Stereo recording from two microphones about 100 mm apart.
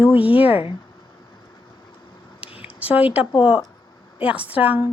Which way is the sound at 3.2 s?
55° left (ahead or behind).